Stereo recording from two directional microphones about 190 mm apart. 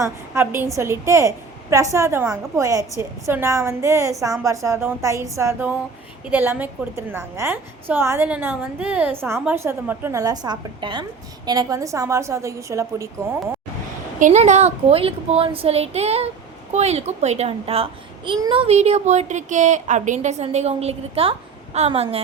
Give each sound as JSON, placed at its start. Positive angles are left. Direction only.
{"t": 0.0, "sound": "a woman's voice", "side_deg": -15}
{"t": 14.2, "sound": "a child's voice", "side_deg": -40}